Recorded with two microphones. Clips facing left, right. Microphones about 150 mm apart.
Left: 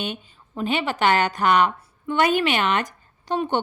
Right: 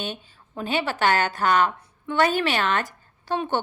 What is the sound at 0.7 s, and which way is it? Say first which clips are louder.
A woman's voice: left 1 dB; 15° left (ahead or behind).